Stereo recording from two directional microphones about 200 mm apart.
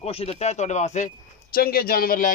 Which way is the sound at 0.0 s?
30° left (ahead or behind).